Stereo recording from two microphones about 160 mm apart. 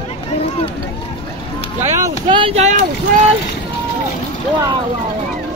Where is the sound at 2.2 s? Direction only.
35° right (ahead or behind).